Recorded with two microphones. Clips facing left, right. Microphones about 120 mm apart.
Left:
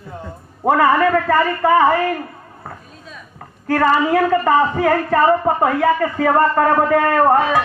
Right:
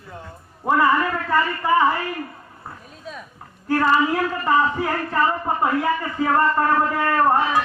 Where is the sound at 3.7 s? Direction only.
60° left (ahead or behind).